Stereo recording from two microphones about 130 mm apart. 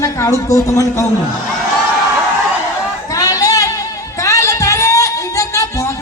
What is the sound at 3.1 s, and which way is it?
Music, 30° left (ahead or behind).